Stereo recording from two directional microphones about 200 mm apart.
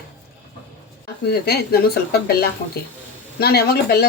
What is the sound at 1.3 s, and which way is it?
Speech, 50° left (ahead or behind).